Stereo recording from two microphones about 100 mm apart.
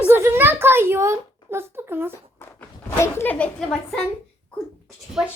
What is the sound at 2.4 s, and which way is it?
Walk, 25° left (ahead or behind).